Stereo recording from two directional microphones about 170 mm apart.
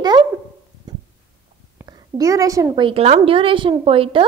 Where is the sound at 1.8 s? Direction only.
20° right (ahead or behind).